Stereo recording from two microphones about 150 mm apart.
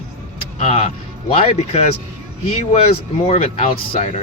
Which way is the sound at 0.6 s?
45° left (ahead or behind).